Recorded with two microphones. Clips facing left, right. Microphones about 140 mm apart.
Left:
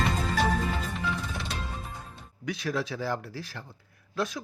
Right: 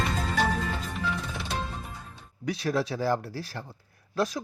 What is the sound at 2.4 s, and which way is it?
Speech, 35° right (ahead or behind).